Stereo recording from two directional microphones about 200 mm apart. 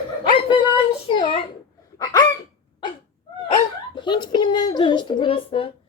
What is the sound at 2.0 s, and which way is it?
Hiccup, 20° left (ahead or behind).